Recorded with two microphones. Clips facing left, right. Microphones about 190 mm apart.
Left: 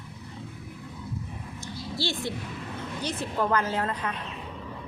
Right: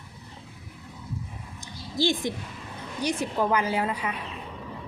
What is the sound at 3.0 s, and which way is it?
Speech, 15° right (ahead or behind).